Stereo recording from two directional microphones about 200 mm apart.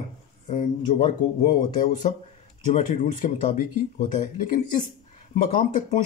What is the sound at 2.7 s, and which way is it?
Speech, 35° left (ahead or behind).